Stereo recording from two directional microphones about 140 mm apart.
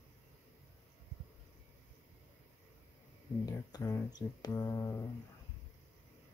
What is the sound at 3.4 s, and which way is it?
Speech, 25° left (ahead or behind).